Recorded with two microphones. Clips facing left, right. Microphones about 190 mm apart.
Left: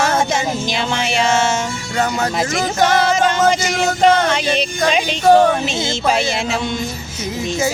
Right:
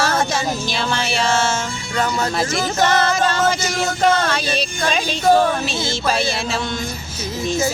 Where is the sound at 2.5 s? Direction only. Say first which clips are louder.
Left 2 dB; 15° left (ahead or behind).